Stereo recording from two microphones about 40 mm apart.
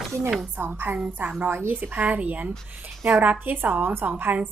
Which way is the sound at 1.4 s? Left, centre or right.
Right.